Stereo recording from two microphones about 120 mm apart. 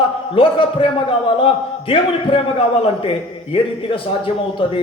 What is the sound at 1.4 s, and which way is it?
A man's voice, 50° left (ahead or behind).